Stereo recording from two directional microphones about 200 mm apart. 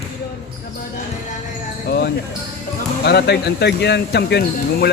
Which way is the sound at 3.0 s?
55° left (ahead or behind).